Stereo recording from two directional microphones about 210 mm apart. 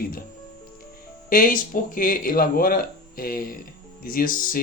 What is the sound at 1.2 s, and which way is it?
Speech, 40° left (ahead or behind).